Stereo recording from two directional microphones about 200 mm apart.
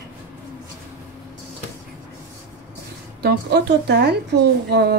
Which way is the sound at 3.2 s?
55° right (ahead or behind).